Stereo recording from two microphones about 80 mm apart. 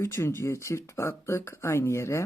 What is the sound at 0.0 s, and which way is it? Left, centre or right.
Speech, left.